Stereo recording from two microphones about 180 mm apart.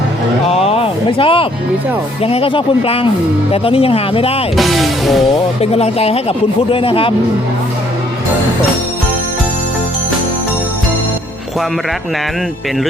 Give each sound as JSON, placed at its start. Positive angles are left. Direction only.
{"t": 0.4, "sound": "a sound", "side_deg": 35}
{"t": 2.2, "sound": "speech", "side_deg": 30}
{"t": 4.5, "sound": "speech", "side_deg": 0}
{"t": 5.7, "sound": "speech", "side_deg": 35}